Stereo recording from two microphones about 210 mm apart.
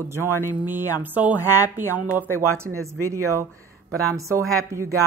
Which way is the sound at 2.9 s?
90° right.